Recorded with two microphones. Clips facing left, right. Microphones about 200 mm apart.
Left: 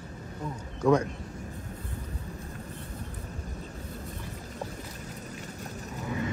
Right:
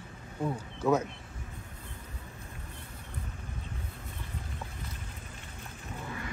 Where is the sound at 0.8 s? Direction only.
5° right (ahead or behind).